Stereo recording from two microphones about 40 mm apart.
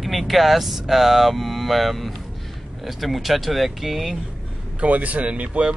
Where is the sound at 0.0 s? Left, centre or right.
Centre.